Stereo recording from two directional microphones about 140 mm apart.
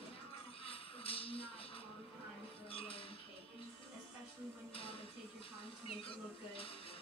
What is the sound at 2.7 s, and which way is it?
Music, 40° left (ahead or behind).